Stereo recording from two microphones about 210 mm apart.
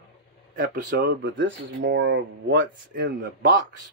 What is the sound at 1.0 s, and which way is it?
Speech, 55° right (ahead or behind).